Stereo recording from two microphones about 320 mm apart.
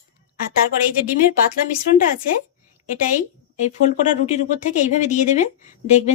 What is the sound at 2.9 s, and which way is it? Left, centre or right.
Speech, left.